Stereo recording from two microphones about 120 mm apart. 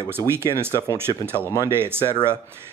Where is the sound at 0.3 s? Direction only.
20° right (ahead or behind).